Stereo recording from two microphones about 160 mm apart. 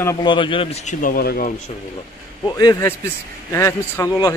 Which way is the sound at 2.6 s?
25° left (ahead or behind).